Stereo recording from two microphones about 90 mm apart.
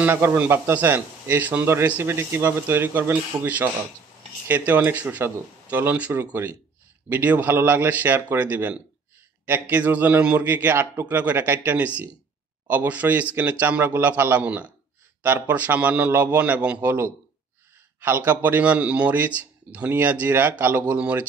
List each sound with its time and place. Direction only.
0.0 s a man's voice: 25° right (ahead or behind)